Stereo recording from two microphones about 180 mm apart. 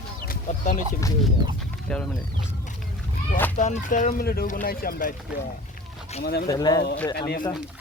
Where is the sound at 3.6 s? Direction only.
45° left (ahead or behind).